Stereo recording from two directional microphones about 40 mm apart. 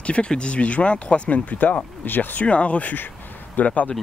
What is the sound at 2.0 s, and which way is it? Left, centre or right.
Speech, left.